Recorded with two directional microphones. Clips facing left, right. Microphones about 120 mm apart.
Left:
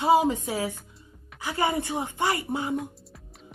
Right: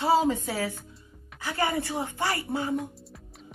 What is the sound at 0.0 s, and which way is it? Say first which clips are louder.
A woman's voice: left 2 dB; 15° left (ahead or behind).